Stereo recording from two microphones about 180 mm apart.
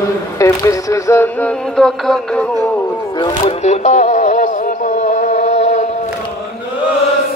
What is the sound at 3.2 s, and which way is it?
Speech, 25° left (ahead or behind).